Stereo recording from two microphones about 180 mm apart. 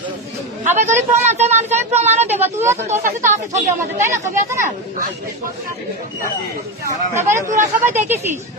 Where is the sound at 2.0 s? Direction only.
40° right (ahead or behind).